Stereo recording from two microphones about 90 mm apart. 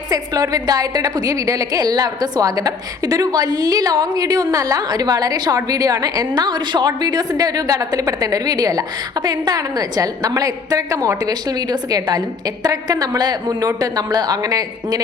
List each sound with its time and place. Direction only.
0.1 s a woman's voice: 40° right (ahead or behind)